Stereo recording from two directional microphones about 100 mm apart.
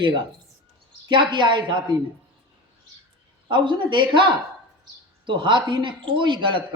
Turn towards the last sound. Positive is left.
turn(degrees=-55)  # may be behind; listen again after turning